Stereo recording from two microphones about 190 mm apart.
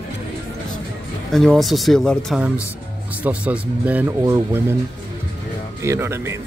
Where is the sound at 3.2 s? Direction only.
5° right (ahead or behind).